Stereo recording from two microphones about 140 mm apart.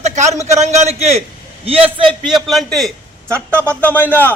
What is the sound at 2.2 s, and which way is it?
Speech, centre (ahead or behind).